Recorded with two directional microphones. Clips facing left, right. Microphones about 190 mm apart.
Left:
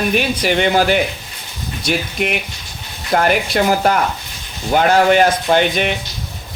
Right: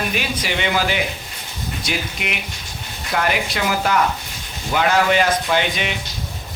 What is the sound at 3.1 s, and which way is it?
Speech, 50° left (ahead or behind).